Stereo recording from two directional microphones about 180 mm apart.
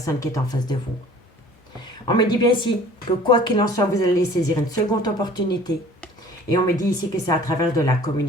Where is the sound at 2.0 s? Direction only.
25° left (ahead or behind).